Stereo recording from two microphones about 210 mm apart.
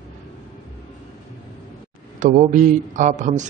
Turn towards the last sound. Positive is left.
turn(degrees=-35)  # may be behind; listen again after turning